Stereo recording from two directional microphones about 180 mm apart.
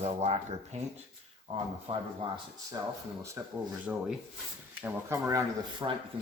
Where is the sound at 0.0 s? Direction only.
35° right (ahead or behind).